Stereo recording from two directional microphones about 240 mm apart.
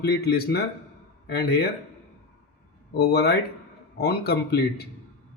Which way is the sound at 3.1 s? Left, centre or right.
Left.